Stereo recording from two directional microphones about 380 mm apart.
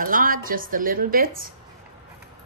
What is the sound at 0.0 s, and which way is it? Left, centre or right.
A woman's voice, right.